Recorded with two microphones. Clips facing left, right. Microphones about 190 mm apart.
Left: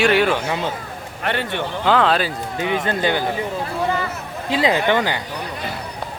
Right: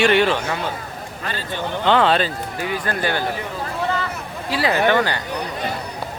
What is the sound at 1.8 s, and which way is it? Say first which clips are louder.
Speech: right 1 dB; centre (ahead or behind).